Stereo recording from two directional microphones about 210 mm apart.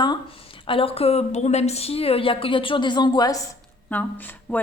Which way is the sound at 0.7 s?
25° left (ahead or behind).